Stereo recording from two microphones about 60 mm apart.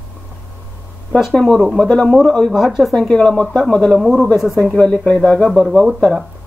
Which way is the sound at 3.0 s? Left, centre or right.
Centre.